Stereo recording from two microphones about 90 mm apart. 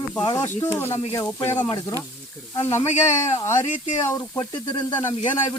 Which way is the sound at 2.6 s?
30° left (ahead or behind).